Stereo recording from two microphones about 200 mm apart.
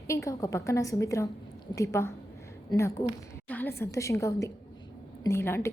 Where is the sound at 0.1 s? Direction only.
15° left (ahead or behind).